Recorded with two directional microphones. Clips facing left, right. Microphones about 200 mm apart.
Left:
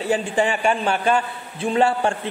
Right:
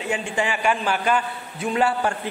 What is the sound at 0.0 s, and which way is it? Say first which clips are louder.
A man's voice: left 5 dB; 35° left (ahead or behind).